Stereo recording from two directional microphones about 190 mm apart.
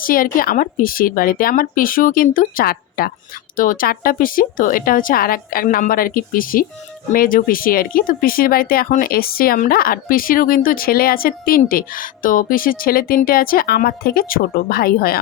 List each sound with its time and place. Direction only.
0.0 s speech: 50° left (ahead or behind)